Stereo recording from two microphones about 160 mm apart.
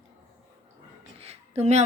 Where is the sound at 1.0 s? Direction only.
40° right (ahead or behind).